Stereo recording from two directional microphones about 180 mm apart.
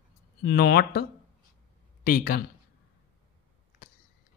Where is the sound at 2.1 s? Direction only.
55° left (ahead or behind).